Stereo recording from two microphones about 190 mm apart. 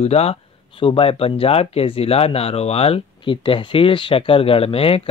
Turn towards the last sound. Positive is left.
turn(degrees=30)  # may be behind; listen again after turning